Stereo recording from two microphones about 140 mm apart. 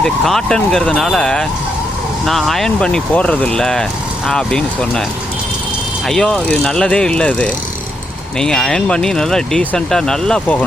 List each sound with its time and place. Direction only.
0.0 s speech: 5° left (ahead or behind)
6.1 s speech: 5° left (ahead or behind)